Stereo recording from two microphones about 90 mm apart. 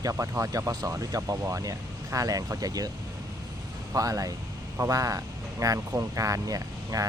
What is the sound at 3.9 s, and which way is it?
Speech, 40° right (ahead or behind).